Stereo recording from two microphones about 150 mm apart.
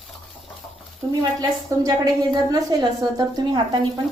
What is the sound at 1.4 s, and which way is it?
A woman's voice, 25° right (ahead or behind).